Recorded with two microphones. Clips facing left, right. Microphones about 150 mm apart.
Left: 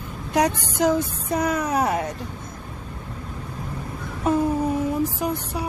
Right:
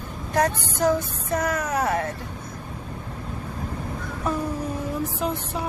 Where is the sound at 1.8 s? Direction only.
20° left (ahead or behind).